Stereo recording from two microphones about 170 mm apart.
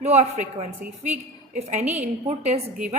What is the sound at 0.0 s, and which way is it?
Speech, 40° right (ahead or behind).